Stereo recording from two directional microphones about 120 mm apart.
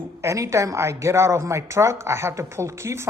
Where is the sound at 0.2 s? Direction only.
25° right (ahead or behind).